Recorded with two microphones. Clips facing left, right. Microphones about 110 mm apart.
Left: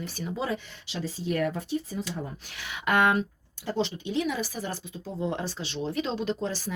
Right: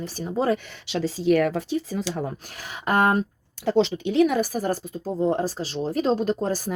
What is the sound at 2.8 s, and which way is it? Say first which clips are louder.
Speech: right 3 dB; 35° right (ahead or behind).